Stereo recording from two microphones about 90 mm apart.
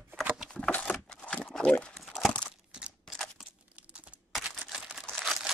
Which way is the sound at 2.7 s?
10° right (ahead or behind).